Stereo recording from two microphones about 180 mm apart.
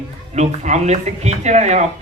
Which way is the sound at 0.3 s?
40° right (ahead or behind).